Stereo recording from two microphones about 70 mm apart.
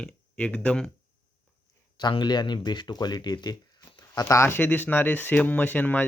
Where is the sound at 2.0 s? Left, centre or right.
Left.